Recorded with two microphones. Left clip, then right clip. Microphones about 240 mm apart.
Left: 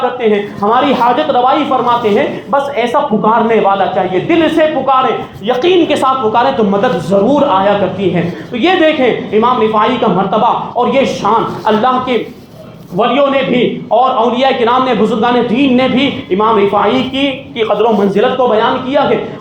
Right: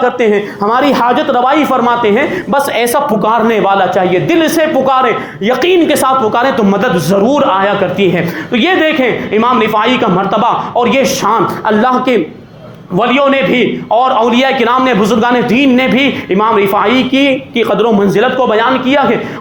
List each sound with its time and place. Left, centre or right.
0.7 s a man's voice: right
2.8 s a man's voice: right